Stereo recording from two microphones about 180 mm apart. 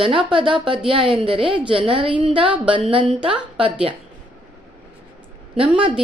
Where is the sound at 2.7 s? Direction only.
30° right (ahead or behind).